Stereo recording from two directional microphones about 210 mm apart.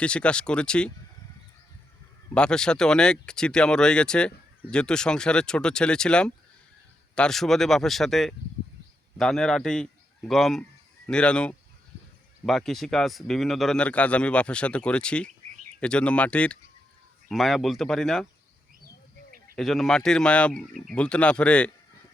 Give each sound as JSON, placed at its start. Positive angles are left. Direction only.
{"t": 0.0, "sound": "speech", "side_deg": 5}
{"t": 2.3, "sound": "a man's voice", "side_deg": 5}
{"t": 19.5, "sound": "speech", "side_deg": 0}